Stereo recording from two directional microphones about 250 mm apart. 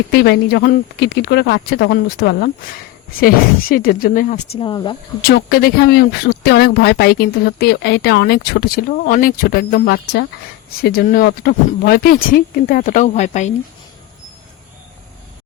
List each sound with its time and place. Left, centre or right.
0.1 s speech: left; by 4.9 s centre
5.3 s speech: left